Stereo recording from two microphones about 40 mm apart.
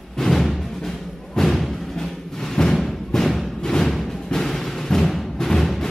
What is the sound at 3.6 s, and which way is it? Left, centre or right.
Music, centre.